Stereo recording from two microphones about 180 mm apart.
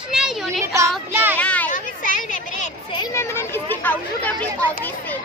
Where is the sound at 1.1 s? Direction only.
10° right (ahead or behind).